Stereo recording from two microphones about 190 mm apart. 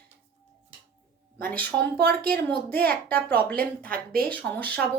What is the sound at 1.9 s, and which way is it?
Speech, 50° right (ahead or behind).